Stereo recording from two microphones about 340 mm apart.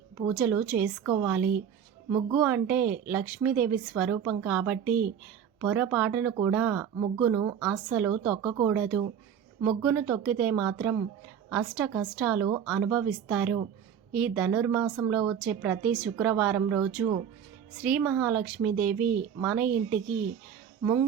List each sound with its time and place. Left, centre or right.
0.3 s a woman's voice: centre
1.4 s speech: right
2.0 s a woman's voice: centre